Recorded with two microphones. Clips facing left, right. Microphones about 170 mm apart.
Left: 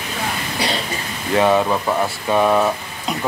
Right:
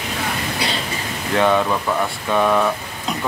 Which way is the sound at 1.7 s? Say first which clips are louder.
Left 1 dB; 20° left (ahead or behind).